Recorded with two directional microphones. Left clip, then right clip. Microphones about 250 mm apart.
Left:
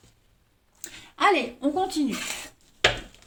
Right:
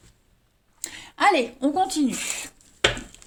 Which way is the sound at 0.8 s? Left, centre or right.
Right.